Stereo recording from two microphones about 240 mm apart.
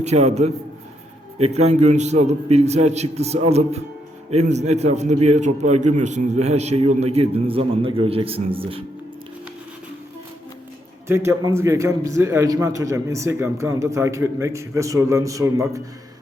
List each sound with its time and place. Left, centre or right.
0.0 s a man's voice: right
1.5 s a man's voice: right
11.1 s a man's voice: centre